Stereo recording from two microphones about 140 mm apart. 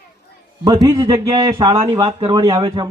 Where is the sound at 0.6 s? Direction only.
30° right (ahead or behind).